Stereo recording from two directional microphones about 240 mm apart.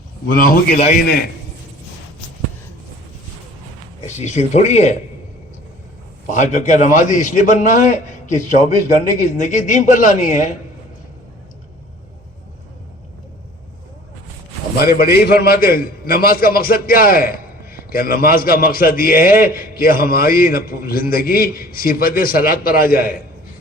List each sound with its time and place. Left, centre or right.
0.3 s a man's voice: left
4.0 s speech: left
6.2 s a man's voice: left
14.8 s a man's voice: left